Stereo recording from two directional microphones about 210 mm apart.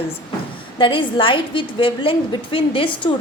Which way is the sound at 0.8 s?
25° left (ahead or behind).